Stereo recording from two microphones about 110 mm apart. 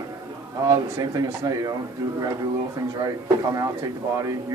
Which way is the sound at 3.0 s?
35° right (ahead or behind).